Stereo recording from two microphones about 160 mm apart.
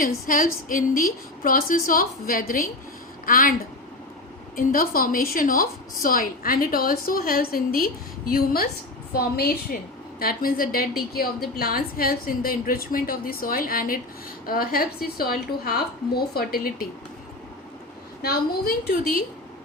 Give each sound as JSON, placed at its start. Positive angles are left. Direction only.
{"t": 0.0, "sound": "a woman's voice", "side_deg": 60}
{"t": 4.5, "sound": "a woman's voice", "side_deg": 65}
{"t": 18.2, "sound": "a woman's voice", "side_deg": 75}